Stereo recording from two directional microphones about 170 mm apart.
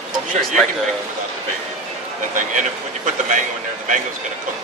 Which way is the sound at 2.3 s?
50° right (ahead or behind).